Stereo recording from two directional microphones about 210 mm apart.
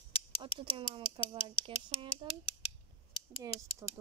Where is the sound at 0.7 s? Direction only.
25° right (ahead or behind).